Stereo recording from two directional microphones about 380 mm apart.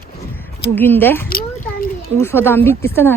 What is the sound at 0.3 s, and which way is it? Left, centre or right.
Speech, centre.